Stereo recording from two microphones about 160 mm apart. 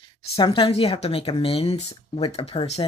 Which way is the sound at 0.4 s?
30° left (ahead or behind).